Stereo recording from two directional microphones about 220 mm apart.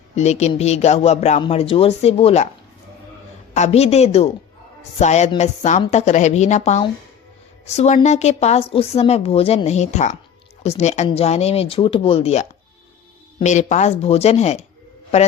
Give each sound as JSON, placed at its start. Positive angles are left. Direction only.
{"t": 0.2, "sound": "a woman's voice", "side_deg": 30}
{"t": 3.5, "sound": "a woman's voice", "side_deg": 30}